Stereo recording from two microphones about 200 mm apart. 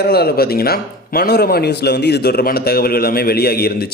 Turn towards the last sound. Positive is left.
turn(degrees=50)  # may be behind; listen again after turning